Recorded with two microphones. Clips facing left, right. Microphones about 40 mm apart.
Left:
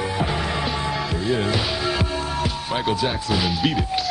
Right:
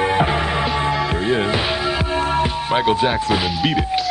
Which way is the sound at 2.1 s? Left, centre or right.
Right.